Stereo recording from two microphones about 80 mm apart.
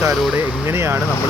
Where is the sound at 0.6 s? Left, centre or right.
Right.